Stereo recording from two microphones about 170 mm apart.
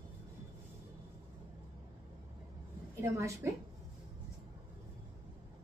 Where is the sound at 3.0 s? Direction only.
15° right (ahead or behind).